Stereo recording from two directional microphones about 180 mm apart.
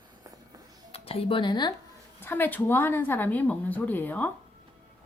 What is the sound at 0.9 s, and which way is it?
Speech, 30° left (ahead or behind).